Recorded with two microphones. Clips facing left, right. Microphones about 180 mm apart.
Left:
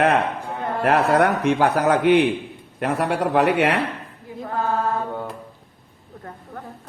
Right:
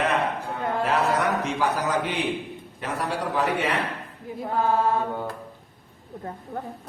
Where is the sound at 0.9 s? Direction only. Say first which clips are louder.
Left 8 dB; 60° left (ahead or behind).